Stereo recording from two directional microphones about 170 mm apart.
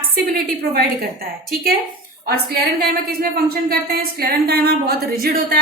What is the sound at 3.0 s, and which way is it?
A woman's voice, 65° right (ahead or behind).